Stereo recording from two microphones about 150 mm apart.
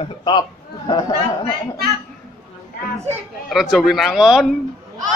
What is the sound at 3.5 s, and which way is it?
A man's voice, 5° right (ahead or behind).